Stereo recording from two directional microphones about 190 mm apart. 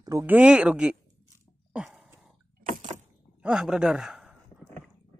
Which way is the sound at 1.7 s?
Centre (ahead or behind).